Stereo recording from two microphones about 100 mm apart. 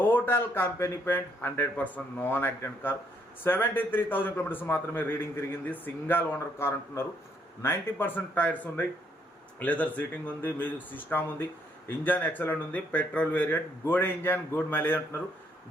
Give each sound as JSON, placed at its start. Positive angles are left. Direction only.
{"t": 0.0, "sound": "a man's voice", "side_deg": 20}